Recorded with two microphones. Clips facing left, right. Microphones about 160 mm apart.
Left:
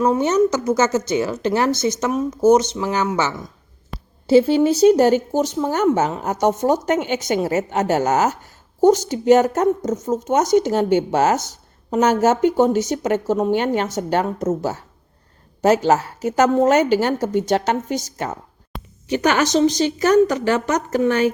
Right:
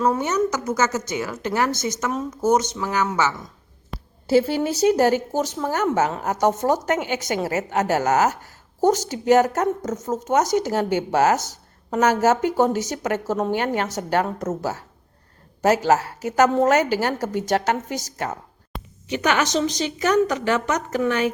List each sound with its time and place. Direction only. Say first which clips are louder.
0.0 s a woman's voice: left 5 dB; 20° left (ahead or behind)
3.9 s a sound: left 1 dB; centre (ahead or behind)
4.3 s a woman's voice: left 5 dB; 20° left (ahead or behind)
19.0 s a woman's voice: left 4 dB; 35° left (ahead or behind)